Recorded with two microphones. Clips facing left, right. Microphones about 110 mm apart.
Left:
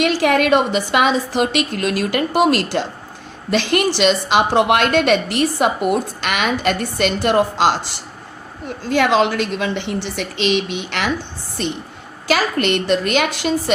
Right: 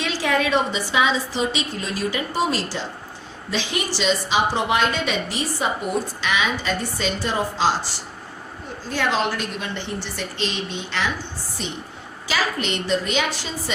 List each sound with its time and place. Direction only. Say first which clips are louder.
0.0 s a woman's voice: left 7 dB; 65° left (ahead or behind)
8.6 s a woman's voice: left 7 dB; 85° left; by 13.7 s 70° left (ahead or behind)